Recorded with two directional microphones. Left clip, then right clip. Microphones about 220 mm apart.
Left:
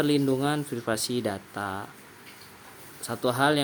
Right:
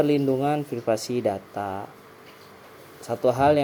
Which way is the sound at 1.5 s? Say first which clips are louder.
Right 3 dB; 20° left (ahead or behind).